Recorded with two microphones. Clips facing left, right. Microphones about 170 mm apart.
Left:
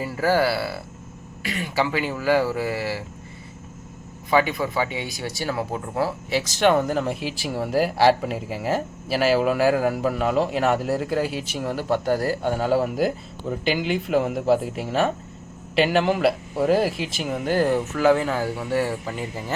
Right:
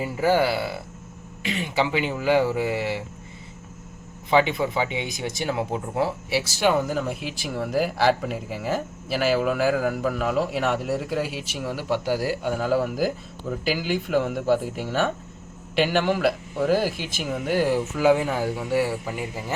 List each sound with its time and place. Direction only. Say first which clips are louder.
0.0 s speech: even; 15° right (ahead or behind)
4.3 s a man's voice: even; 20° right (ahead or behind)